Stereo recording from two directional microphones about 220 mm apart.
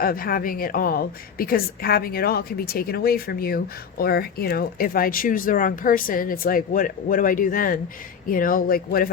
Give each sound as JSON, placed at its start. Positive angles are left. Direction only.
{"t": 0.0, "sound": "a woman's voice", "side_deg": 40}